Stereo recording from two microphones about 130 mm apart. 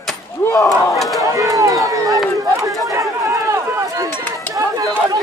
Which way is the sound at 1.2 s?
25° right (ahead or behind).